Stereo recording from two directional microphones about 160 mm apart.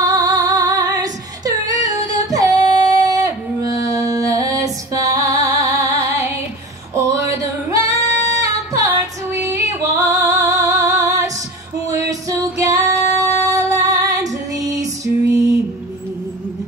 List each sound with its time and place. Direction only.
0.0 s female singing: 25° right (ahead or behind)